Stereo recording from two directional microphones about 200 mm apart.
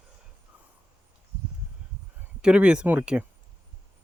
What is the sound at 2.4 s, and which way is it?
Speech, 5° right (ahead or behind).